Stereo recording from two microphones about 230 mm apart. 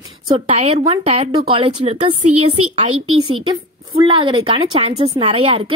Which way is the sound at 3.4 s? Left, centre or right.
Right.